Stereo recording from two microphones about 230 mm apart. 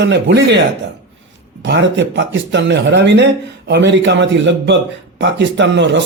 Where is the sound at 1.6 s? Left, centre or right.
Right.